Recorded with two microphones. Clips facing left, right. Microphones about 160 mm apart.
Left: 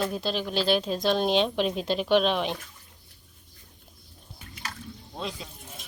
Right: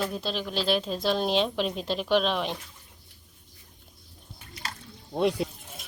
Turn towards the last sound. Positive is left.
turn(degrees=-65)  # may be behind; listen again after turning